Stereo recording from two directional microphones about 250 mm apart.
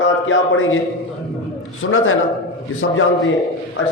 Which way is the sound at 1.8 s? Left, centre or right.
Left.